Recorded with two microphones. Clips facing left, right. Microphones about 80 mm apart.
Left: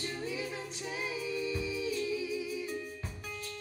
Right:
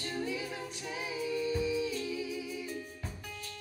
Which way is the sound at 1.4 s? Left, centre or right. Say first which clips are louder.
Right 4 dB; right.